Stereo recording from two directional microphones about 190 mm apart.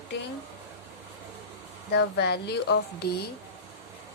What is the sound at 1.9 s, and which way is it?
Speech, 65° left (ahead or behind).